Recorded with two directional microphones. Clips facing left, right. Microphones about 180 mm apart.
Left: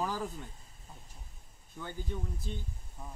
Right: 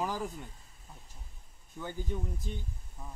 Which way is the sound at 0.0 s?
15° right (ahead or behind).